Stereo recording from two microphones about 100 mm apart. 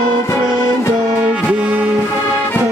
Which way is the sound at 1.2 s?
10° right (ahead or behind).